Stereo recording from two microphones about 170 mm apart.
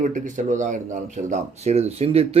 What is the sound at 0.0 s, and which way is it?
Speech, 45° right (ahead or behind).